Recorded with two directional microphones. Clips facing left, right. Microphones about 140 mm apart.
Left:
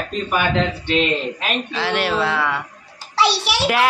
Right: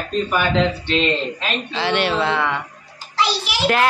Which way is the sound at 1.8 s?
Centre (ahead or behind).